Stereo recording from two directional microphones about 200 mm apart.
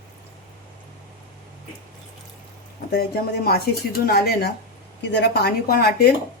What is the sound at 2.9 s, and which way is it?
Speech, 50° left (ahead or behind).